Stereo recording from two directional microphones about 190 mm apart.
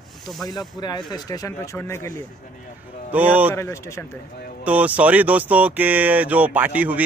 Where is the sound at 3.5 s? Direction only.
15° left (ahead or behind).